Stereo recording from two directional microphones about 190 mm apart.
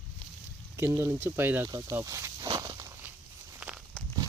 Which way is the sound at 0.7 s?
15° right (ahead or behind).